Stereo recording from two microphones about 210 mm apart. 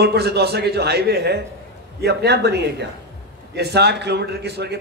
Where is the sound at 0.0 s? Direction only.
50° right (ahead or behind).